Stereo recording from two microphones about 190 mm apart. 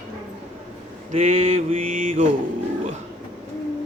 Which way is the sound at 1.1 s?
35° right (ahead or behind).